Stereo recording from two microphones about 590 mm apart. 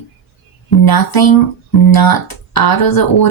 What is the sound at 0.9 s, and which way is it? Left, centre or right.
Speech, left.